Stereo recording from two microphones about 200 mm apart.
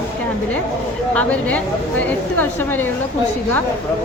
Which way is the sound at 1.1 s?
5° left (ahead or behind).